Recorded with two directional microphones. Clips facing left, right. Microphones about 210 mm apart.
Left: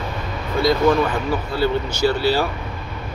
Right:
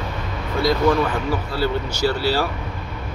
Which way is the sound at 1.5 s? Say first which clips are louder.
Left 2 dB; 20° left (ahead or behind).